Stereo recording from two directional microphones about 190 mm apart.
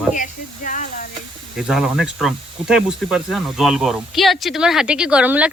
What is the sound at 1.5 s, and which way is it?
Speech, 5° right (ahead or behind).